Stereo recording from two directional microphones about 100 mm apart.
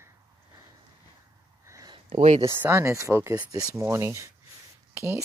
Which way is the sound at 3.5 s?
35° right (ahead or behind).